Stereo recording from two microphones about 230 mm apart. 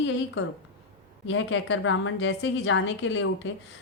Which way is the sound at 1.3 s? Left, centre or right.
Left.